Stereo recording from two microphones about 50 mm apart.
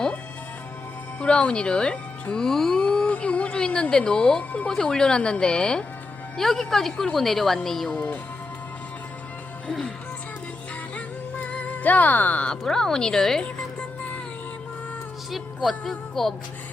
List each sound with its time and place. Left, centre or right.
1.2 s a woman's voice: left
2.5 s a sound: centre
3.1 s a woman's voice: left; by 7.9 s centre
7.9 s speech: left
10.9 s music: left
12.6 s speech: centre
15.8 s speech: centre